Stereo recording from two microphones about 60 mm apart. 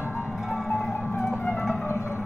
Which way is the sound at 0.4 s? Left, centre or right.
Centre.